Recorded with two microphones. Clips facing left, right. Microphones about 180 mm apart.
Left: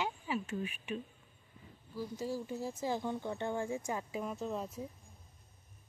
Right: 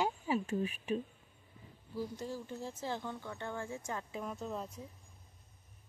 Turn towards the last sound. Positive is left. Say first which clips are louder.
# left 3 dB
turn(degrees=5)  # may be behind; listen again after turning